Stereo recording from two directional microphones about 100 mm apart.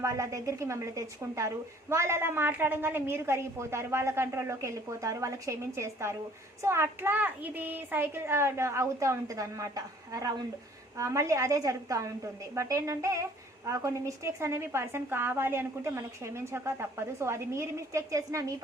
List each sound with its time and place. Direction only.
0.0 s a woman's voice: 30° right (ahead or behind)